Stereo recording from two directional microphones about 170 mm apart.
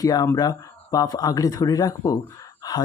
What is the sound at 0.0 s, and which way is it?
Speech, 20° left (ahead or behind).